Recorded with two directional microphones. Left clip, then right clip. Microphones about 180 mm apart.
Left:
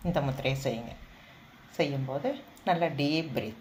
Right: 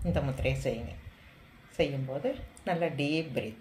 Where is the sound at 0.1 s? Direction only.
20° right (ahead or behind).